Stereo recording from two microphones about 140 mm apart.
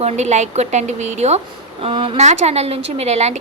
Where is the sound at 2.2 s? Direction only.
50° right (ahead or behind).